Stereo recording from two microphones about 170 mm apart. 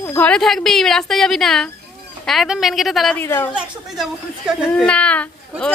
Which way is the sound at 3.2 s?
15° left (ahead or behind).